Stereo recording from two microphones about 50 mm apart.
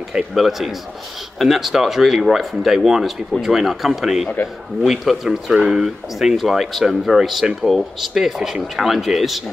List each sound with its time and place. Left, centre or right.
0.1 s speech: centre